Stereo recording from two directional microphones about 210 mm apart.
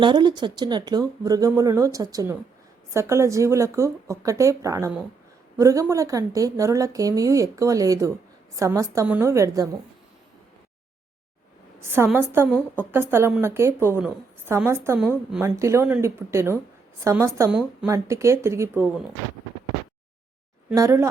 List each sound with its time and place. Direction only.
0.0 s a woman's voice: 20° right (ahead or behind)
11.8 s a woman's voice: 10° right (ahead or behind)
15.4 s a woman's voice: 15° right (ahead or behind)
20.7 s a woman's voice: 15° right (ahead or behind)